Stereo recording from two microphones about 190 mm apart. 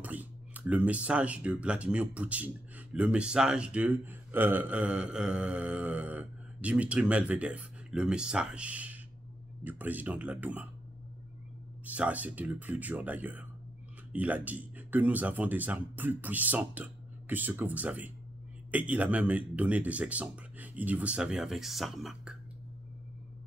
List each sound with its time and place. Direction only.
0.0 s speech: 10° right (ahead or behind)
11.8 s speech: 10° right (ahead or behind)